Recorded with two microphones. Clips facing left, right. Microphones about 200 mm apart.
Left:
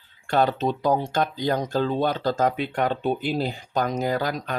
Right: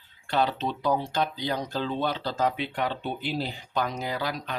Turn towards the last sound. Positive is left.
turn(degrees=45)  # may be behind; listen again after turning